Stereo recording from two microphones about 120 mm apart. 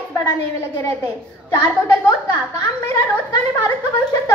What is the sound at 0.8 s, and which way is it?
A woman's voice, 30° left (ahead or behind).